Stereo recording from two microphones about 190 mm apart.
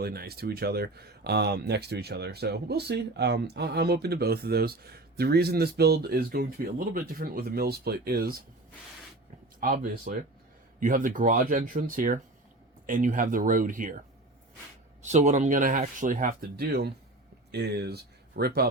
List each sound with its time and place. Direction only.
0.0 s speech: 55° right (ahead or behind)
9.6 s speech: 50° right (ahead or behind)
15.0 s speech: 40° right (ahead or behind); by 18.7 s 55° right (ahead or behind)